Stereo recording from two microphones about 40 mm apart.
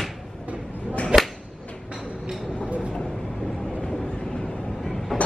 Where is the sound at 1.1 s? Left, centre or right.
Right.